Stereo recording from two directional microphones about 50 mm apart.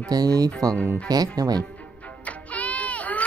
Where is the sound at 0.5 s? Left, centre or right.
Centre.